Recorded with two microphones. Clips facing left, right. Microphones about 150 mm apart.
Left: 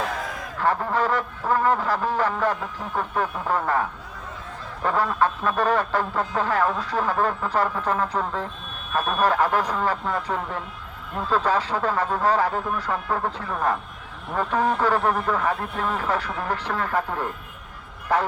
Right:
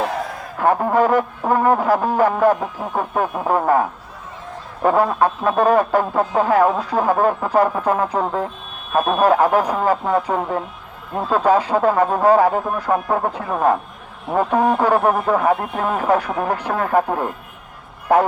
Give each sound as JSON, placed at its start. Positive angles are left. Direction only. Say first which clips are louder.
{"t": 0.6, "sound": "speech", "louder": "right 7 dB", "side_deg": -45}